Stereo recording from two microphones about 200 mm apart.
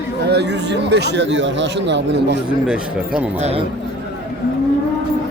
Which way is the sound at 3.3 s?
35° right (ahead or behind).